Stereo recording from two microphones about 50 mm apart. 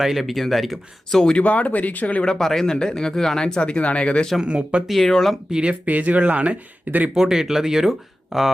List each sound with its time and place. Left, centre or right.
0.0 s speech: centre
1.2 s speech: centre
1.5 s speech: left
2.2 s speech: centre
3.4 s speech: left
4.4 s speech: centre
4.9 s speech: centre
5.5 s speech: centre
5.8 s speech: right
7.1 s speech: centre